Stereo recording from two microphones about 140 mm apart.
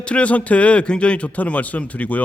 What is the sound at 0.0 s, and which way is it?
Speech, 10° left (ahead or behind).